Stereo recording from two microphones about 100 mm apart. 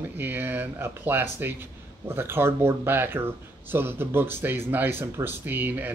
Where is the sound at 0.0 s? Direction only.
20° right (ahead or behind).